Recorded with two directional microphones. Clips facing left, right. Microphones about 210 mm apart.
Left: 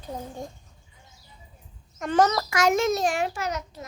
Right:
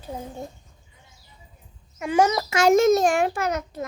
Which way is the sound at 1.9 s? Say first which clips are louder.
Right 1 dB; 10° right (ahead or behind).